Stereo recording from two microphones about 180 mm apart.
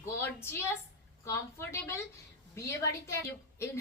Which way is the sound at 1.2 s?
15° left (ahead or behind).